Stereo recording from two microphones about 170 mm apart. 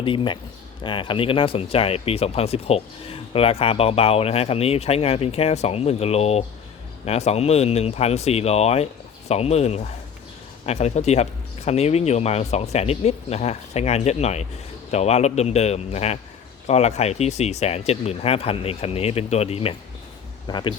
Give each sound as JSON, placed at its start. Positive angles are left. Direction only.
{"t": 0.0, "sound": "speech", "side_deg": 30}